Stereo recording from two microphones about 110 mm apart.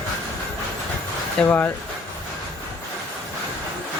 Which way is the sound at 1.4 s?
15° left (ahead or behind).